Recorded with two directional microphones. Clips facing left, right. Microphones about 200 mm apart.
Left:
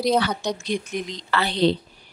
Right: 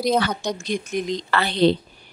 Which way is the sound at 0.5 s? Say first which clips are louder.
Right 1 dB; 45° right (ahead or behind).